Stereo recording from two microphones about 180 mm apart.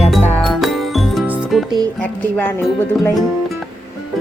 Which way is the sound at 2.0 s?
10° left (ahead or behind).